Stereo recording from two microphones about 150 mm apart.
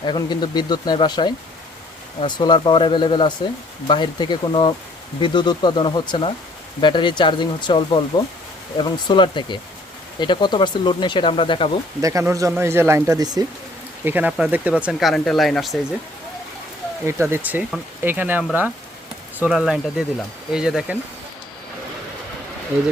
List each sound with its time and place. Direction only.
0.0 s speech: 30° left (ahead or behind)
12.0 s speech: 20° right (ahead or behind)
14.0 s speech: 10° right (ahead or behind)
17.1 s speech: 15° right (ahead or behind)